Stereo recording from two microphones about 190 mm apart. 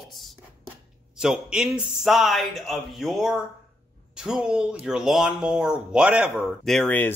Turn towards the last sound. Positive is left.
turn(degrees=10)  # may be behind; listen again after turning